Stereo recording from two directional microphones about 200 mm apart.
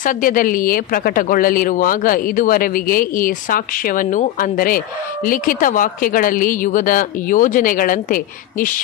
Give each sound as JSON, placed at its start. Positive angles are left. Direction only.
{"t": 0.0, "sound": "speech", "side_deg": 45}